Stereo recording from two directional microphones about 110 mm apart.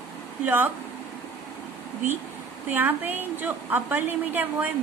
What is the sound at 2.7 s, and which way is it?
A woman's voice, 15° right (ahead or behind).